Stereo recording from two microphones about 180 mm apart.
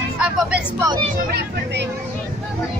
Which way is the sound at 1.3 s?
70° right (ahead or behind).